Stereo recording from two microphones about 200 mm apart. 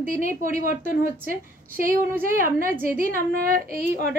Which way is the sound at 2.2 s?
45° right (ahead or behind).